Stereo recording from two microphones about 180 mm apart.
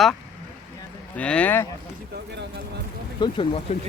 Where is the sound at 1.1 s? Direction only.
5° left (ahead or behind).